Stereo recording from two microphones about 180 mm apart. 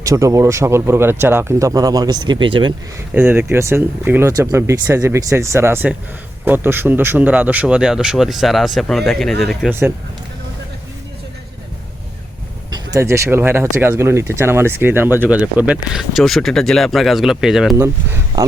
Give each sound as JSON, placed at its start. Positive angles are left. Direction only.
{"t": 0.0, "sound": "speech", "side_deg": -15}
{"t": 3.2, "sound": "speech", "side_deg": -10}
{"t": 12.7, "sound": "speech", "side_deg": -15}
{"t": 17.7, "sound": "speech", "side_deg": -15}